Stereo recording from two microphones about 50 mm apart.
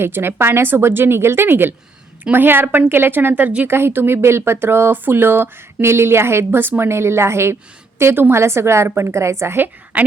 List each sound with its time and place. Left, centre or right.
0.0 s speech: right
3.7 s speech: right
9.9 s speech: right